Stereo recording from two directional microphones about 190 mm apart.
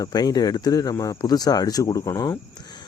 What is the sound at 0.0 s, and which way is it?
A man's voice, 20° left (ahead or behind).